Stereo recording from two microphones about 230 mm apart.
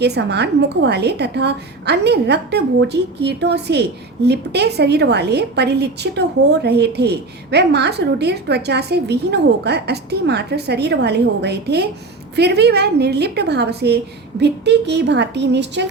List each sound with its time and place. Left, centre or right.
0.0 s a woman's voice: right